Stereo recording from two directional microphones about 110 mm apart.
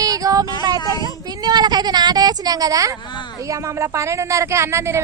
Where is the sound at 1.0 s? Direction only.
40° right (ahead or behind).